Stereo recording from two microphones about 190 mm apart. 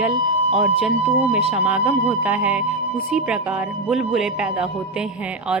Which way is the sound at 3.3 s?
10° right (ahead or behind).